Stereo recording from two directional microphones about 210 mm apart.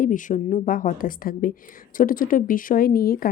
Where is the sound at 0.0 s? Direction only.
40° left (ahead or behind).